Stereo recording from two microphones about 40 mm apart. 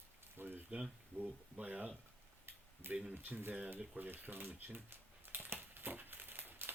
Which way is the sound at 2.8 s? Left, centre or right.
Right.